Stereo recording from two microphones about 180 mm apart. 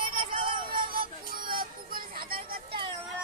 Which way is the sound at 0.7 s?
55° right (ahead or behind).